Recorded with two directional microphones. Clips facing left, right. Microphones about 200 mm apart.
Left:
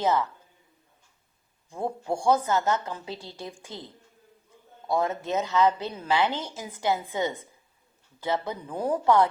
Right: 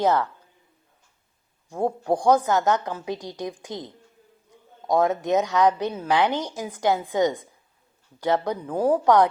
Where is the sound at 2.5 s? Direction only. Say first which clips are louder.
Right 4 dB; 80° right.